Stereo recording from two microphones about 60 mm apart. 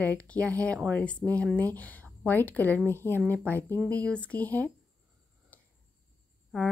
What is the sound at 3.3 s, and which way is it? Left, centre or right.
Speech, left.